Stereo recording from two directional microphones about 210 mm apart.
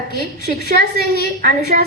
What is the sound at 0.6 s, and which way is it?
Speech, 50° left (ahead or behind).